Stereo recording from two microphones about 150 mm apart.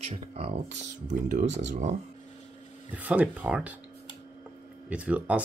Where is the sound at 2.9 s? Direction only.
10° right (ahead or behind).